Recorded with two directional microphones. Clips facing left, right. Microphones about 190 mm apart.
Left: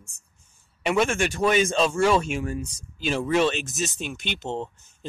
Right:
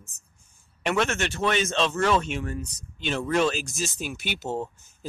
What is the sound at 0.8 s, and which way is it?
Speech, 10° left (ahead or behind).